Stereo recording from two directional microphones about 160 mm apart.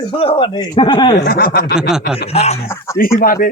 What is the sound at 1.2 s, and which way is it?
Speech, 80° left.